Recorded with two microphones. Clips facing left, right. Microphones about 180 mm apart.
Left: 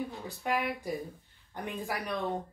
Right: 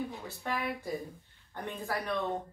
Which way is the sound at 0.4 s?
10° left (ahead or behind).